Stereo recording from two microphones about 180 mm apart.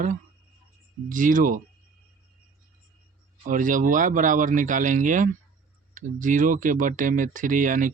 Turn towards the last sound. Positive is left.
turn(degrees=-45)  # may be behind; listen again after turning